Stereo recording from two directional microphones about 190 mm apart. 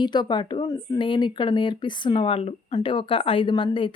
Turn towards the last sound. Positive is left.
turn(degrees=25)  # may be behind; listen again after turning